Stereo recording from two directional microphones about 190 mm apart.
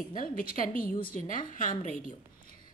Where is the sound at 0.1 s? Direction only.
50° left (ahead or behind).